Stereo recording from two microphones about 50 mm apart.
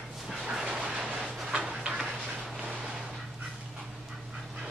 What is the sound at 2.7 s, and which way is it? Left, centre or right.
Vehicle, centre.